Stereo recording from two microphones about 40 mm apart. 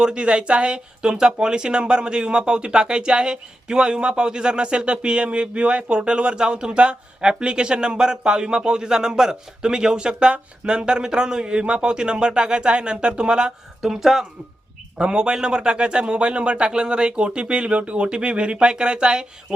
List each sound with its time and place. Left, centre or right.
0.0 s speech: right
13.8 s speech: centre
14.9 s speech: right